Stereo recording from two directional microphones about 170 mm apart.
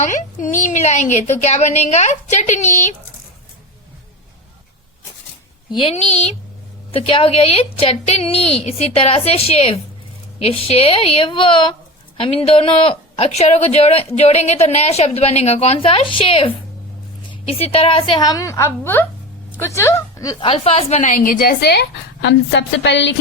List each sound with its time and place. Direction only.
0.1 s a woman's voice: 45° left (ahead or behind)
5.7 s a woman's voice: 35° left (ahead or behind); by 20.3 s 20° left (ahead or behind)
20.4 s speech: 35° left (ahead or behind); by 23.1 s 90° left